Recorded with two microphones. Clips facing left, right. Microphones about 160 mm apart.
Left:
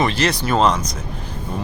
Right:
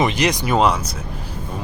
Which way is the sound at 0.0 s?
15° right (ahead or behind).